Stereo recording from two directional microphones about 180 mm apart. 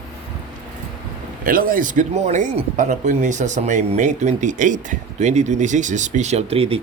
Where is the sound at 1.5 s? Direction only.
50° right (ahead or behind).